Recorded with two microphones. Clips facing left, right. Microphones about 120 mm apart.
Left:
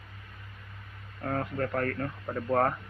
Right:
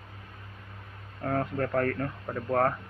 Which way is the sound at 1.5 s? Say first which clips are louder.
Right 3 dB; centre (ahead or behind).